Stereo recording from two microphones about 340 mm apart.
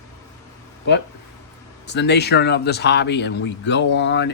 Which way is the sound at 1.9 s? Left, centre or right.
Left.